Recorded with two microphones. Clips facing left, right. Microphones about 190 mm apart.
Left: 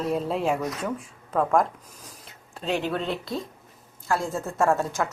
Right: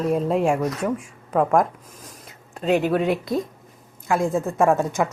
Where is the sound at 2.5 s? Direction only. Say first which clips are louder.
Right 7 dB; 50° right (ahead or behind).